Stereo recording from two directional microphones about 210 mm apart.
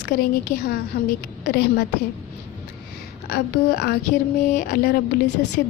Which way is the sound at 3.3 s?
50° left (ahead or behind).